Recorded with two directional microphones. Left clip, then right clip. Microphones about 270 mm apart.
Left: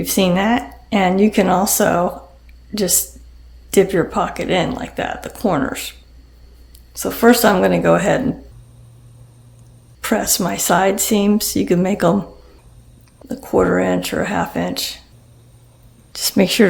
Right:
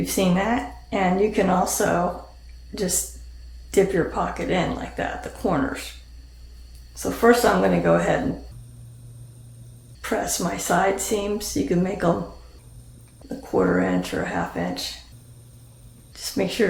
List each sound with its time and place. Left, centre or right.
0.0 s speech: left
3.7 s speech: left
6.9 s speech: left
10.0 s speech: left
13.2 s speech: left
16.1 s speech: left